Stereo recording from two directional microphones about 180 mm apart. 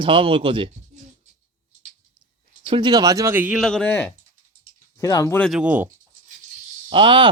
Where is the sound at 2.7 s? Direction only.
25° right (ahead or behind); by 3.6 s 10° right (ahead or behind).